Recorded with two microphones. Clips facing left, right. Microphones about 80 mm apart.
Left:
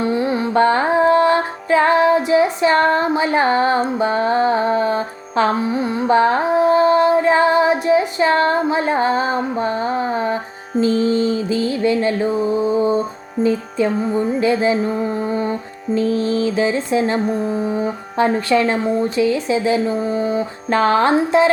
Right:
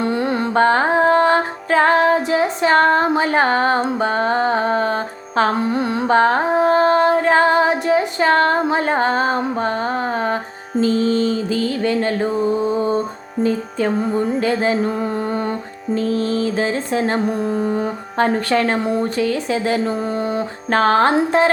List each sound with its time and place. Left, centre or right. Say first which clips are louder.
0.0 s carnatic music: left 1 dB; right
0.5 s music: even; right
6.1 s music: left 1 dB; right
10.8 s mantra: left 1 dB; left
11.7 s music: left 2 dB; right
13.4 s music: left 1 dB; right
14.3 s speech: left 4 dB; right
15.2 s music: left 1 dB; right
16.0 s music: left 2 dB; right
17.6 s speech: even; right